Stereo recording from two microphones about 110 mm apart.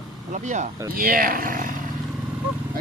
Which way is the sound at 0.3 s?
90° right.